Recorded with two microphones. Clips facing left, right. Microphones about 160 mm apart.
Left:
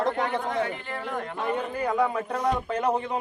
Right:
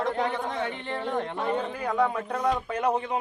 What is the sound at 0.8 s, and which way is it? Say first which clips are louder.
Speech: right 3 dB; 30° right (ahead or behind).